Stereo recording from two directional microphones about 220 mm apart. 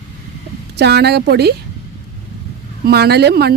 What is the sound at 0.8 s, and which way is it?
Speech, 50° right (ahead or behind).